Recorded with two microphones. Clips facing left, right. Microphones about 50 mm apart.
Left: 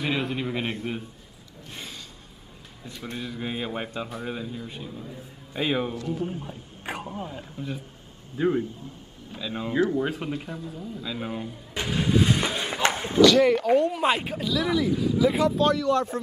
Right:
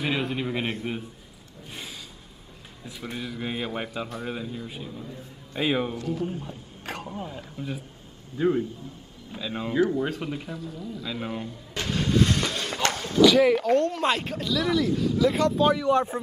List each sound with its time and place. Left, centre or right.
0.0 s a man's voice: centre
1.7 s a sound: centre
2.8 s a man's voice: centre
6.2 s speech: centre
9.3 s a man's voice: centre
9.8 s a man's voice: centre
11.4 s a sound: centre
13.2 s a man's voice: centre
13.7 s speech: centre
15.6 s speech: centre